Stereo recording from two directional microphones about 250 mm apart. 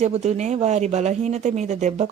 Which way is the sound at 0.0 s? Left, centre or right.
Right.